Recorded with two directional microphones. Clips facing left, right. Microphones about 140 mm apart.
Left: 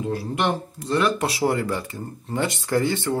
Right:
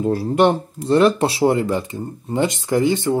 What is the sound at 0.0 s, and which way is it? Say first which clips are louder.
Speech: right 8 dB; 40° right (ahead or behind).